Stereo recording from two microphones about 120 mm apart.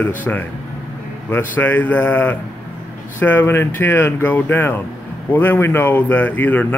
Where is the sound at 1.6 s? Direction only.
15° left (ahead or behind).